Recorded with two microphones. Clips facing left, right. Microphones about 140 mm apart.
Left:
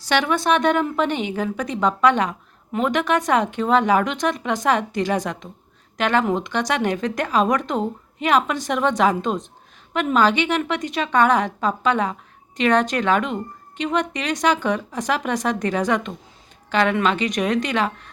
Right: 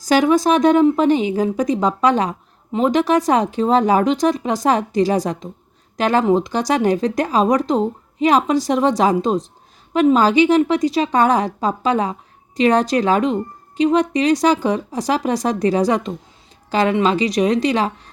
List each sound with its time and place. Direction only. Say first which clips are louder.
0.1 s a woman's voice: right 5 dB; 40° right (ahead or behind)